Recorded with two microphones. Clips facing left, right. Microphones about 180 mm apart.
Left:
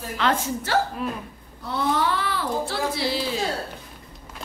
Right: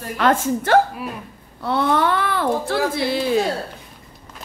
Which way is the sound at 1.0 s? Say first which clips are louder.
Left 1 dB; 10° right (ahead or behind).